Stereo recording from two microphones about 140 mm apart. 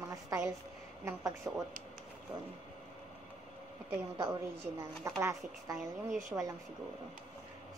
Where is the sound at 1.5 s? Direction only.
20° right (ahead or behind).